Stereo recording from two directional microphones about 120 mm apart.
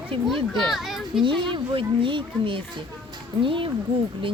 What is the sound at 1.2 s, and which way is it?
Speech, 45° right (ahead or behind).